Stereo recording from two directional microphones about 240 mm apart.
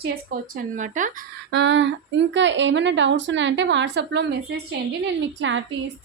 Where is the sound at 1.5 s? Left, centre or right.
Right.